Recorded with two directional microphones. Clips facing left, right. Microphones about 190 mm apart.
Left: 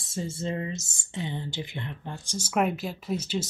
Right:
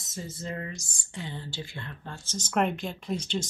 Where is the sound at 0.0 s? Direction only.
30° left (ahead or behind).